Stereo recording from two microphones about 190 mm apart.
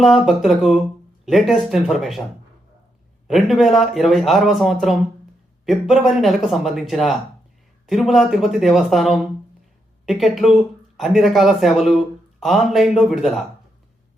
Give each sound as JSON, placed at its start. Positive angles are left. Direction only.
{"t": 0.0, "sound": "speech", "side_deg": 0}
{"t": 3.2, "sound": "speech", "side_deg": 0}